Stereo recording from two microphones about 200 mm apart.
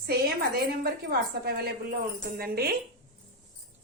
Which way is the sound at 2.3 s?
50° right (ahead or behind).